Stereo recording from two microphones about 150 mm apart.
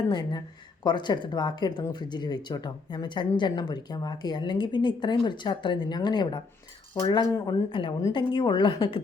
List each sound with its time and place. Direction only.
0.1 s speech: 30° left (ahead or behind)